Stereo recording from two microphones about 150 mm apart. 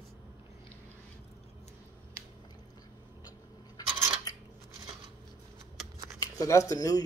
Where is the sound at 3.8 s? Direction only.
25° left (ahead or behind).